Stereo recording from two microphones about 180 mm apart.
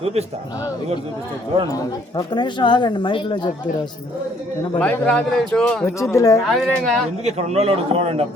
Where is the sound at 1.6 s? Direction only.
20° left (ahead or behind).